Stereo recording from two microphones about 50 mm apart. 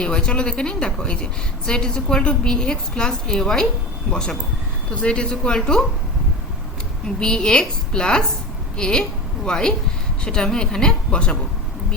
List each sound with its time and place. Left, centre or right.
0.0 s a woman's voice: centre
7.2 s a woman's voice: centre